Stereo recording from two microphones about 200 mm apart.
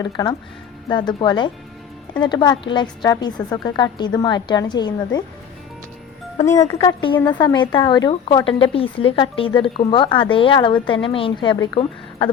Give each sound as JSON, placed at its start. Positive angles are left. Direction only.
{"t": 0.0, "sound": "a woman's voice", "side_deg": 20}
{"t": 6.7, "sound": "a woman's voice", "side_deg": 25}